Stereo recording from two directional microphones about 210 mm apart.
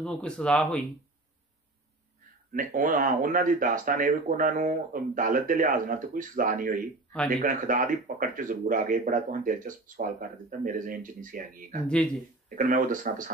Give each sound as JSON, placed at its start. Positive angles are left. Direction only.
{"t": 0.0, "sound": "speech", "side_deg": 5}
{"t": 2.5, "sound": "speech", "side_deg": -40}